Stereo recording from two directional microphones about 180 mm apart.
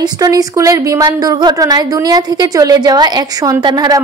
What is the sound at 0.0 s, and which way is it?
A woman's voice, 20° right (ahead or behind).